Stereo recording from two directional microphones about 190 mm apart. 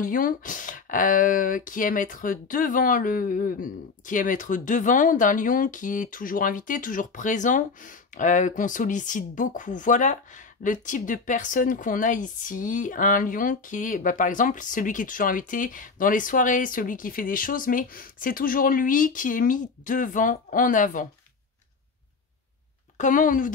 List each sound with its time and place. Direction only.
0.0 s speech: 45° left (ahead or behind)
22.9 s speech: 45° left (ahead or behind)